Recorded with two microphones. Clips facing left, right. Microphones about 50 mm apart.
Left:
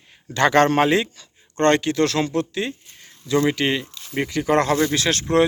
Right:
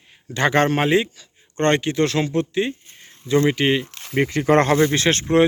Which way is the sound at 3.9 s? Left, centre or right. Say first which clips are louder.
Right 3 dB; right.